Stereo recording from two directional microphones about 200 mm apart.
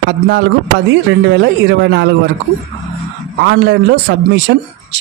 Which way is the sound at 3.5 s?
60° right (ahead or behind).